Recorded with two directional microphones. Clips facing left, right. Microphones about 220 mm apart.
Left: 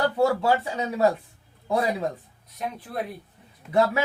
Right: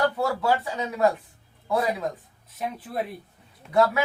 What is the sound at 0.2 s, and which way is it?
Speech, 25° left (ahead or behind).